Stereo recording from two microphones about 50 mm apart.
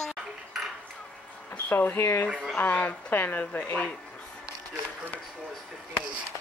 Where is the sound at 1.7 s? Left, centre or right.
Left.